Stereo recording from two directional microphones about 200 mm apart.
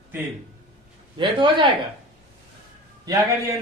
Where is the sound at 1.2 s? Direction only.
25° right (ahead or behind).